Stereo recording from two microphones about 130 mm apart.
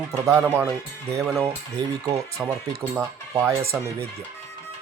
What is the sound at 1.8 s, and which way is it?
Speech, 35° right (ahead or behind).